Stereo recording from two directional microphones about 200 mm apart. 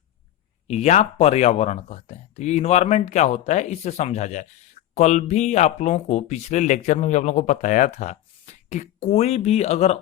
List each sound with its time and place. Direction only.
0.7 s speech: 35° left (ahead or behind)